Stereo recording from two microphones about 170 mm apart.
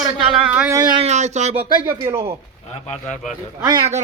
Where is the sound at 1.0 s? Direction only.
40° right (ahead or behind).